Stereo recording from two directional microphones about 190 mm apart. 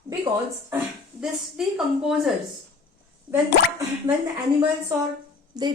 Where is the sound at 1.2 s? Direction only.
5° right (ahead or behind).